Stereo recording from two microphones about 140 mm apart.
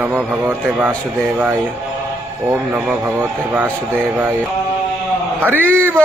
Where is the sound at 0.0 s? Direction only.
15° right (ahead or behind).